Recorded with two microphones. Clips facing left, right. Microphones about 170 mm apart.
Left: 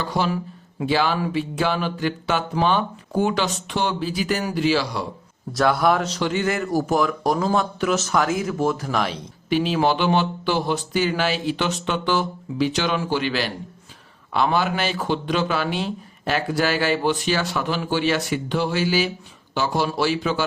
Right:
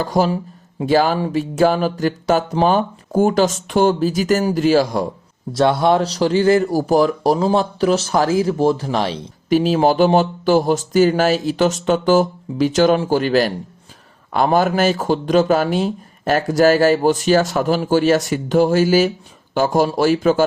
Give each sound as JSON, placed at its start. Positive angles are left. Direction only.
{"t": 0.0, "sound": "a man's voice", "side_deg": -45}
{"t": 5.5, "sound": "speech", "side_deg": -25}
{"t": 9.5, "sound": "a man's voice", "side_deg": -40}